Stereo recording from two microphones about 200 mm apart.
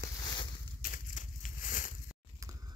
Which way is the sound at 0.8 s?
40° left (ahead or behind).